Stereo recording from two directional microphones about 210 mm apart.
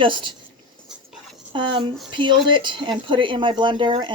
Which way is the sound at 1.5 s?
25° right (ahead or behind).